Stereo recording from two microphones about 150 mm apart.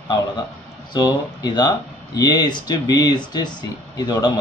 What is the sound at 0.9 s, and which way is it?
Speech, 25° left (ahead or behind).